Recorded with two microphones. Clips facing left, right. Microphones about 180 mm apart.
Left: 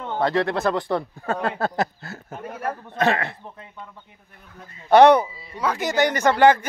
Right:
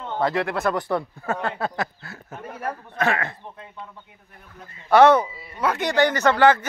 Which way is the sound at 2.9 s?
30° left (ahead or behind).